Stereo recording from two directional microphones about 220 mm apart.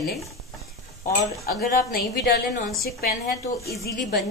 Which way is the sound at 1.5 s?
45° left (ahead or behind).